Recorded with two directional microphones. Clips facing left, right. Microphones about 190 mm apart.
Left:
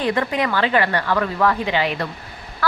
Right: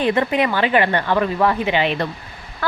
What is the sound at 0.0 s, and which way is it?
A woman's voice, 20° right (ahead or behind).